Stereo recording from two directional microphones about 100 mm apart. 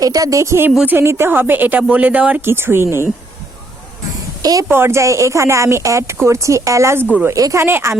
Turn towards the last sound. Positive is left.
turn(degrees=-25)  # may be behind; listen again after turning